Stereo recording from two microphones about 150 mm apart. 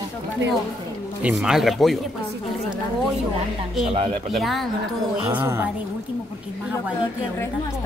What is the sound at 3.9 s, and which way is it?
Speech, 40° right (ahead or behind).